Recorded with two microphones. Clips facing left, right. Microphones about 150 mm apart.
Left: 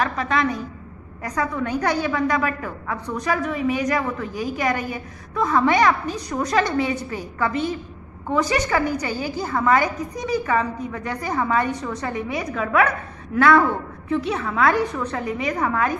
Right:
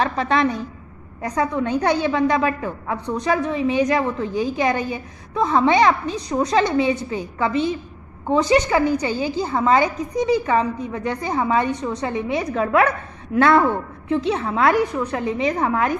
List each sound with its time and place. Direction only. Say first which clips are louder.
0.0 s a woman's voice: right 3 dB; 30° right (ahead or behind)